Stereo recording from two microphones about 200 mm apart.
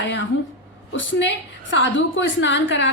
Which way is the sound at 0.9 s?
65° left (ahead or behind).